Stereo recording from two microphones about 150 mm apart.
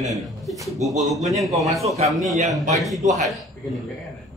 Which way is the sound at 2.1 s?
Centre (ahead or behind).